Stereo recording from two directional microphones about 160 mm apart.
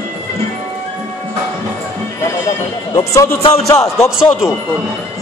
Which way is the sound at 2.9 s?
20° left (ahead or behind).